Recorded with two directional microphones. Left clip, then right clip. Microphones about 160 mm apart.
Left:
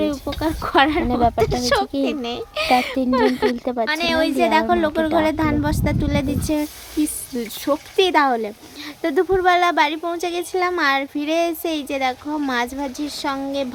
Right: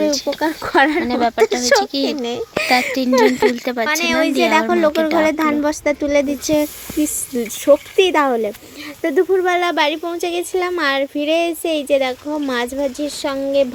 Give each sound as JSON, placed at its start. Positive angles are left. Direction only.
{"t": 0.3, "sound": "speech", "side_deg": -15}
{"t": 1.0, "sound": "speech", "side_deg": 15}
{"t": 1.4, "sound": "speech", "side_deg": -20}
{"t": 3.5, "sound": "speech", "side_deg": 10}
{"t": 3.8, "sound": "speech", "side_deg": -15}
{"t": 4.9, "sound": "speech", "side_deg": 5}
{"t": 5.1, "sound": "speech", "side_deg": -15}